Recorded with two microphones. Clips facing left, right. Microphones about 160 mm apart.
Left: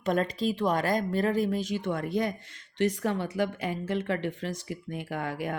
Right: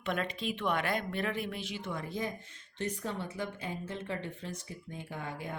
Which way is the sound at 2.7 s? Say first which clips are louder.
Left 9 dB; 90° left.